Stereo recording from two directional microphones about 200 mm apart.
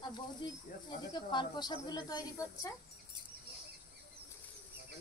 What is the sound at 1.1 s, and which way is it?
Speech, 20° left (ahead or behind).